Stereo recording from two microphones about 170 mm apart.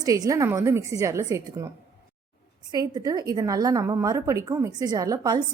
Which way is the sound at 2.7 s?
25° right (ahead or behind).